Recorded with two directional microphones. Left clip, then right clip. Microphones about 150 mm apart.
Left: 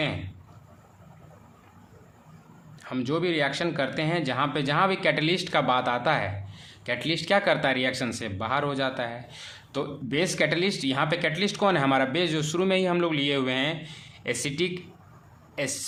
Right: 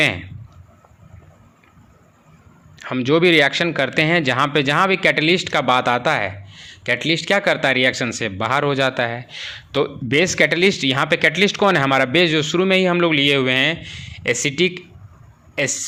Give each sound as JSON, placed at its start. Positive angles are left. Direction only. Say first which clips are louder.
{"t": 2.9, "sound": "speech", "louder": "right 12 dB", "side_deg": -30}